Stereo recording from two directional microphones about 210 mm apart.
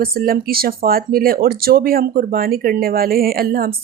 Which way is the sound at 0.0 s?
45° right (ahead or behind).